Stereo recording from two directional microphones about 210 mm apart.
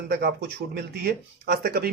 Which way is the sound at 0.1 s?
50° right (ahead or behind).